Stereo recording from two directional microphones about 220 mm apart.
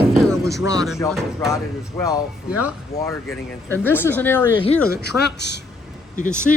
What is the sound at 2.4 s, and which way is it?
Speech, 5° right (ahead or behind).